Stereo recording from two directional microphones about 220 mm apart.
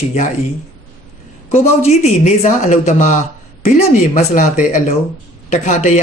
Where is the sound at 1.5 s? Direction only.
30° left (ahead or behind).